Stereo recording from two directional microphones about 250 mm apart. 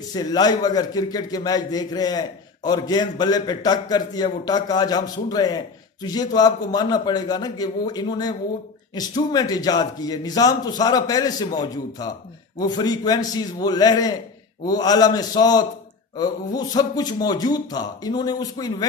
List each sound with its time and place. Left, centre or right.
0.1 s a man's voice: centre
12.5 s a man's voice: centre